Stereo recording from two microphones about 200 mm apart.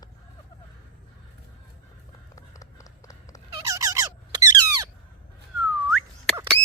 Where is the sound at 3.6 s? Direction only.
15° right (ahead or behind).